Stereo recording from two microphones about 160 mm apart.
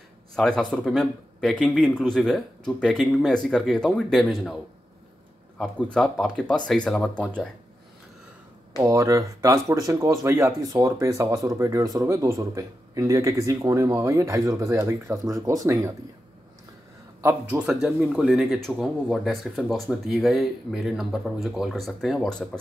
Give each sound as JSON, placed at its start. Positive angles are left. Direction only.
{"t": 0.4, "sound": "speech", "side_deg": 5}
{"t": 5.6, "sound": "speech", "side_deg": 5}
{"t": 8.7, "sound": "speech", "side_deg": -20}
{"t": 17.2, "sound": "speech", "side_deg": -10}